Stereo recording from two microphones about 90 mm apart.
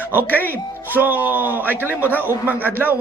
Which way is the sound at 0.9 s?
20° right (ahead or behind).